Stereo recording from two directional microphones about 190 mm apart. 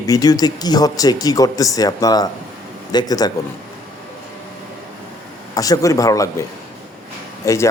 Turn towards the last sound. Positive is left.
turn(degrees=15)  # may be behind; listen again after turning